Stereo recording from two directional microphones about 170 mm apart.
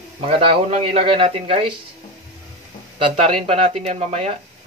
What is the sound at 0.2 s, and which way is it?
Speech, 35° right (ahead or behind).